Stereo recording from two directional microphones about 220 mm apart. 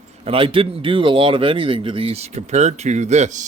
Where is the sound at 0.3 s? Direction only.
25° right (ahead or behind).